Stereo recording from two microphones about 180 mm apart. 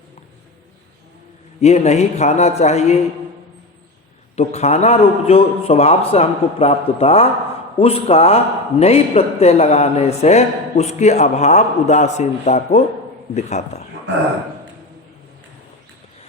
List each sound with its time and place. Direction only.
1.6 s a man's voice: 35° left (ahead or behind)
4.4 s a man's voice: 35° left (ahead or behind)